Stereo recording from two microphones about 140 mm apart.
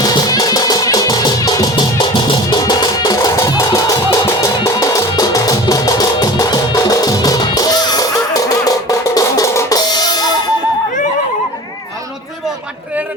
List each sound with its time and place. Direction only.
0.0 s music: 30° left (ahead or behind)